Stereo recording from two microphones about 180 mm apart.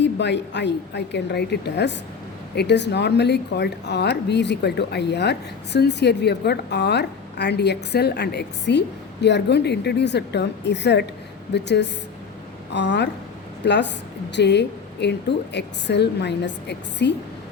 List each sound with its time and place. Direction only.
0.0 s a woman's voice: 75° left (ahead or behind)